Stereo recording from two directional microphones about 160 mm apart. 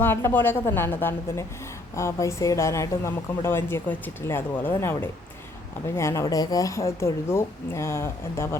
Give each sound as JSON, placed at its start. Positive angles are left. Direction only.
{"t": 0.0, "sound": "speech", "side_deg": 15}